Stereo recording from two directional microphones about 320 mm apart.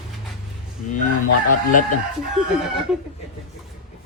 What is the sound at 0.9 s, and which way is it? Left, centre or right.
Fowl, left.